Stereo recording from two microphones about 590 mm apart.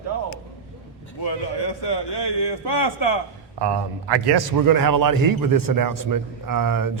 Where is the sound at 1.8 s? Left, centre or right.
Left.